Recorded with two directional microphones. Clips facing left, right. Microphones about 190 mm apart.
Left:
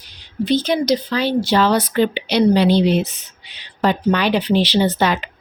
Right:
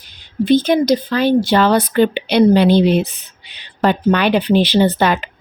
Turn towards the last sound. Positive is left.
turn(degrees=-55)  # may be behind; listen again after turning